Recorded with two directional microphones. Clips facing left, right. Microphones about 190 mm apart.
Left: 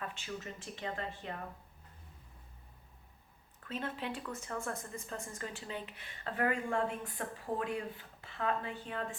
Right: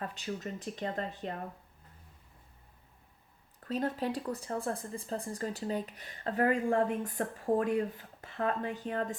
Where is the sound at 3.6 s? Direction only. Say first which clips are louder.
Right 7 dB; 40° right (ahead or behind).